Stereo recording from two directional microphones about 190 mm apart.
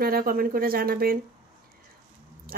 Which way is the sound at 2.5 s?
50° right (ahead or behind).